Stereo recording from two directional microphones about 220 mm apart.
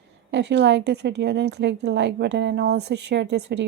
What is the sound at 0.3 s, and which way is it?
A woman's voice, 50° right (ahead or behind).